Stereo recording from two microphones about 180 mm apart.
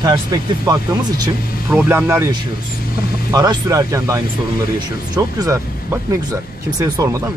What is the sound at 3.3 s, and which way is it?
Speech, 20° right (ahead or behind).